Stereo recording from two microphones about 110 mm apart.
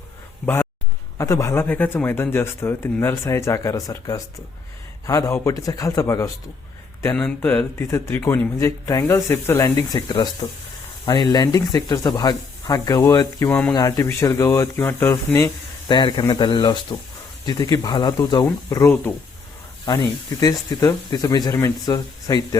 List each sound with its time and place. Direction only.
0.4 s speech: 20° left (ahead or behind)
7.2 s speech: 10° left (ahead or behind)
8.5 s speech: 30° left (ahead or behind)
13.5 s speech: 15° left (ahead or behind)
13.7 s speech: 30° left (ahead or behind)
15.9 s a man's voice: 45° left (ahead or behind)
19.8 s speech: 40° left (ahead or behind)